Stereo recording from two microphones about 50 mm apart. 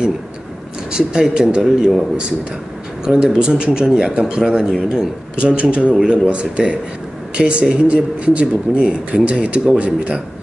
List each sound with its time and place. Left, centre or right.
0.9 s speech: centre
3.1 s speech: centre